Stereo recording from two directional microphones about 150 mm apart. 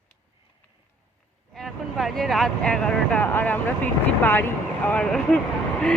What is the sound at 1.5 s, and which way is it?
Speech, centre (ahead or behind).